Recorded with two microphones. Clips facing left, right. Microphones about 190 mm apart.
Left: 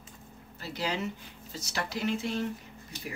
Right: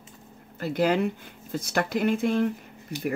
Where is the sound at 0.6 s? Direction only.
55° right (ahead or behind).